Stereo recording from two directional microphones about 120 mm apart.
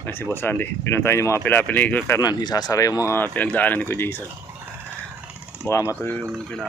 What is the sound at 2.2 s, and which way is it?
Speech, 35° left (ahead or behind).